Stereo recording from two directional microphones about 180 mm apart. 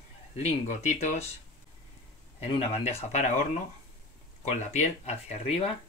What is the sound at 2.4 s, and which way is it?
Speech, 35° left (ahead or behind).